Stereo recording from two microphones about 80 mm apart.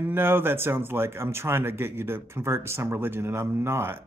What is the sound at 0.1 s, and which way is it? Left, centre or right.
Speech, right.